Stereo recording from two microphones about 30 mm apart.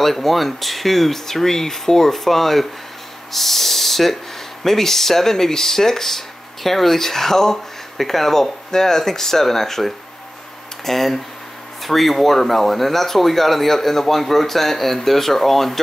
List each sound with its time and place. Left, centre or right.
0.0 s speech: centre